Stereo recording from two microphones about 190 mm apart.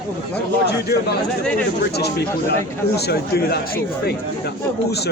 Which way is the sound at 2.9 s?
60° left (ahead or behind).